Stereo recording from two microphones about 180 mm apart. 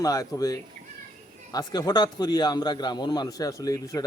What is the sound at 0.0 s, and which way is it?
A man's voice, 20° left (ahead or behind).